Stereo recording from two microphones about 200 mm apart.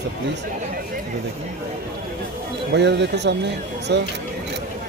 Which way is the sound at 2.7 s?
60° right (ahead or behind).